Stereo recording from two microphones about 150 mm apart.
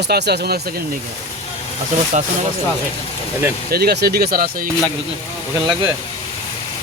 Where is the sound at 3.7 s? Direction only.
90° right.